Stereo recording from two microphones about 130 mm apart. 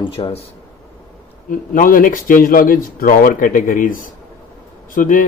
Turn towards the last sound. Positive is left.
turn(degrees=90)